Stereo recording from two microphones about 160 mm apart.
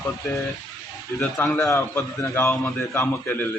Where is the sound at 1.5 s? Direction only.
20° left (ahead or behind).